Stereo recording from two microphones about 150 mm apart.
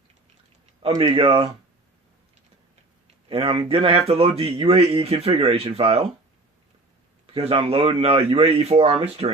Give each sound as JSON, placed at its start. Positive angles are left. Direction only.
{"t": 0.8, "sound": "speech", "side_deg": -35}
{"t": 3.2, "sound": "speech", "side_deg": -35}
{"t": 7.3, "sound": "speech", "side_deg": -40}